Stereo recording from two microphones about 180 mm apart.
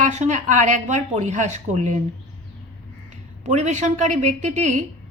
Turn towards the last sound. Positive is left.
turn(degrees=-40)  # may be behind; listen again after turning